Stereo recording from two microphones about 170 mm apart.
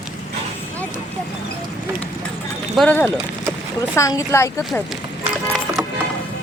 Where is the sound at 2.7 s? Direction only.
10° left (ahead or behind).